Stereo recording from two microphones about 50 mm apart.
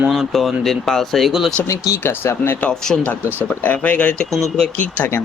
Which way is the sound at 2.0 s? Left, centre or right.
Left.